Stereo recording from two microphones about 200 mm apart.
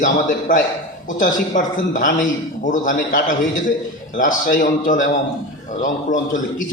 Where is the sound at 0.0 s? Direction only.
40° left (ahead or behind).